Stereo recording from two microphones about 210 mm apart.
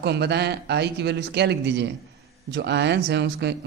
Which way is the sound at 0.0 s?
50° right (ahead or behind).